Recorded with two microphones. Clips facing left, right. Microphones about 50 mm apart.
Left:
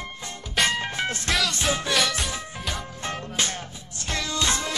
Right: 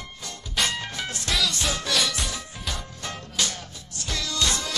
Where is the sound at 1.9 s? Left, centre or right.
Centre.